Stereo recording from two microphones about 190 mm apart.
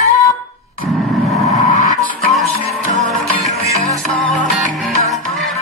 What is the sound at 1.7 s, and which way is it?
Music, 45° left (ahead or behind).